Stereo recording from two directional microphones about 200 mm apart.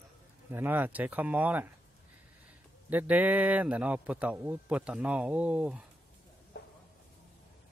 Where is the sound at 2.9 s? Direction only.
10° right (ahead or behind).